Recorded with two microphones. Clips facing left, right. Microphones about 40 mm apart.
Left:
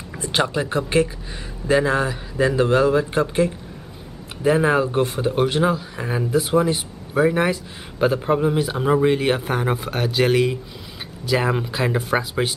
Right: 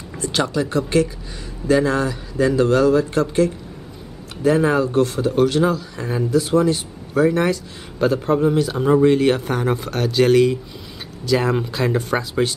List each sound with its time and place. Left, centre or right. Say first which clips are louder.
0.2 s a man's voice: right 1 dB; left